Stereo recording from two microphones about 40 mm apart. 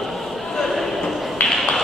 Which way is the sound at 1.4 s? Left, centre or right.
Centre.